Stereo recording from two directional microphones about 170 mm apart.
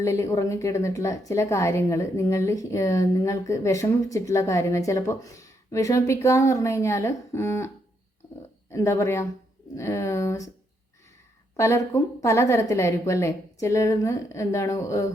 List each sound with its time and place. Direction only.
0.0 s a woman's voice: 15° left (ahead or behind)
8.2 s a sound: 20° left (ahead or behind)
8.7 s a woman's voice: 15° left (ahead or behind)
11.5 s a woman's voice: 20° left (ahead or behind)